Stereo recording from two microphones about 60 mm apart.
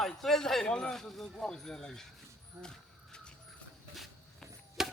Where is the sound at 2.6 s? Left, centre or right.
Centre.